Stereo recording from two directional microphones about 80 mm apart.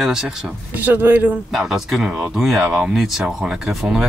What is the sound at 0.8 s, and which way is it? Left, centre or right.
Speech, right.